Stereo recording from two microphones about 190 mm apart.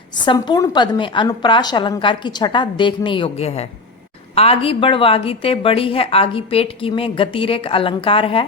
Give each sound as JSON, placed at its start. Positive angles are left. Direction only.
{"t": 0.2, "sound": "a woman's voice", "side_deg": 25}